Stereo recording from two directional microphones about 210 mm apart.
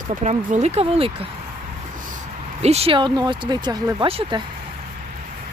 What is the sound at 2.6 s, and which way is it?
Speech, 30° right (ahead or behind).